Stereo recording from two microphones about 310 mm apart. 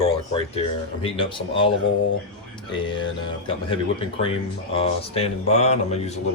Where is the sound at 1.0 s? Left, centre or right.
Centre.